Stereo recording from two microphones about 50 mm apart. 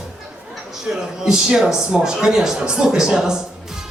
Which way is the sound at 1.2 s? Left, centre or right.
Centre.